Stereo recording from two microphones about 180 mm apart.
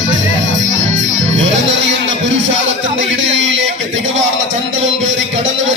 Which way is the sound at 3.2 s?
90° right.